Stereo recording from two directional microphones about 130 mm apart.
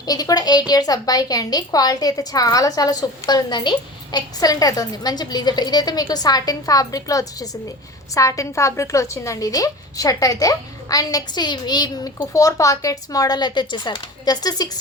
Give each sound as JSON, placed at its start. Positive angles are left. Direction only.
{"t": 0.0, "sound": "a woman's voice", "side_deg": 30}